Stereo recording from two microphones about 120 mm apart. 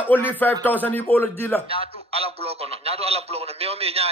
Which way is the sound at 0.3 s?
15° left (ahead or behind).